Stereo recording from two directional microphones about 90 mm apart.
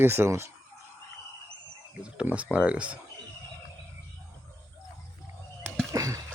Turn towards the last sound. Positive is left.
turn(degrees=-35)  # may be behind; listen again after turning